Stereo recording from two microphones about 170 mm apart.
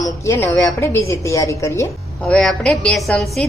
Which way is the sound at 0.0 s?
15° left (ahead or behind).